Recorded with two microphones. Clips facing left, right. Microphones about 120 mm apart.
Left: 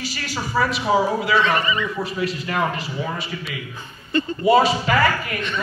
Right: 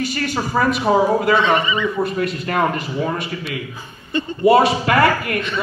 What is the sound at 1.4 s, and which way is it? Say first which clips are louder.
Speech: right 3 dB; 25° right (ahead or behind).